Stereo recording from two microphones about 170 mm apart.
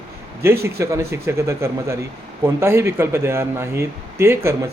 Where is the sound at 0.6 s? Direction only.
15° right (ahead or behind).